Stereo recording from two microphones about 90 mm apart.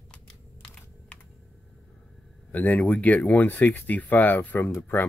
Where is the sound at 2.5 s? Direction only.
20° left (ahead or behind).